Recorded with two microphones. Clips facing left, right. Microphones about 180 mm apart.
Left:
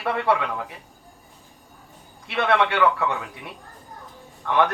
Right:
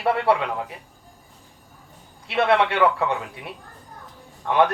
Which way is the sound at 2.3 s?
30° right (ahead or behind).